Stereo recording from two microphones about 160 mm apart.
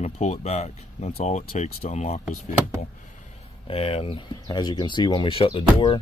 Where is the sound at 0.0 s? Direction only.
45° left (ahead or behind).